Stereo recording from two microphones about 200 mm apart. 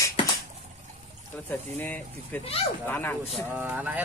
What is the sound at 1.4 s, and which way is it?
Speech, 10° left (ahead or behind).